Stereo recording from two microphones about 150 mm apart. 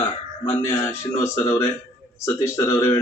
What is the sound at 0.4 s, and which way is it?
Speech, 15° left (ahead or behind).